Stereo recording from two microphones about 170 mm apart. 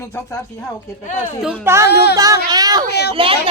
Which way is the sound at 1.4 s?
15° right (ahead or behind).